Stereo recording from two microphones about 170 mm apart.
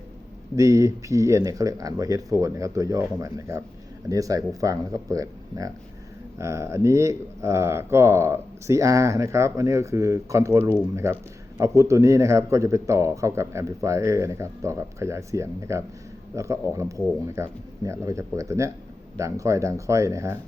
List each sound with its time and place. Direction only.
0.5 s speech: 20° right (ahead or behind)